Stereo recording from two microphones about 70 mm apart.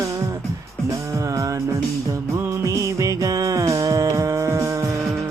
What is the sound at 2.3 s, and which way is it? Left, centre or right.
Music, right.